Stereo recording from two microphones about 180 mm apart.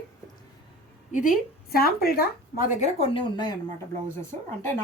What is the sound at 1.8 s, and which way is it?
Speech, 60° left (ahead or behind).